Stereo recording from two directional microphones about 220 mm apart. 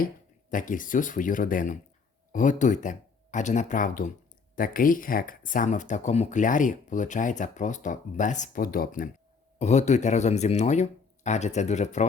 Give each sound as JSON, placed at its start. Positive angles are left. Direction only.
{"t": 0.5, "sound": "speech", "side_deg": 35}